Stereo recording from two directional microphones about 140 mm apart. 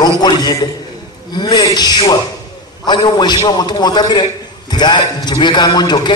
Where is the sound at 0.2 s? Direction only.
30° left (ahead or behind).